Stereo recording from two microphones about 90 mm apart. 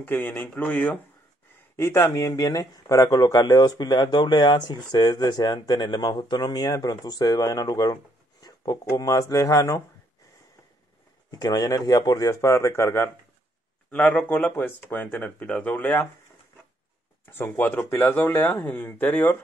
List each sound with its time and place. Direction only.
0.0 s speech: 20° left (ahead or behind)
2.0 s speech: 40° left (ahead or behind)
4.0 s speech: 55° left (ahead or behind); by 9.8 s 35° left (ahead or behind)
11.2 s speech: 45° left (ahead or behind); by 13.1 s 30° left (ahead or behind)
13.8 s speech: 15° left (ahead or behind)
17.3 s speech: 25° left (ahead or behind)